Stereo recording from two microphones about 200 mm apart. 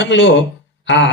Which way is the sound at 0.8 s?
60° left (ahead or behind).